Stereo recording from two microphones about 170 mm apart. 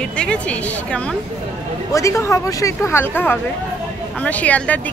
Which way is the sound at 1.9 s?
20° left (ahead or behind).